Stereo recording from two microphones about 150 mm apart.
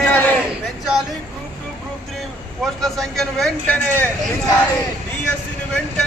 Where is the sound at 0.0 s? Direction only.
10° left (ahead or behind).